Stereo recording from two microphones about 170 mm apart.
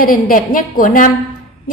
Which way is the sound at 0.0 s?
55° left (ahead or behind).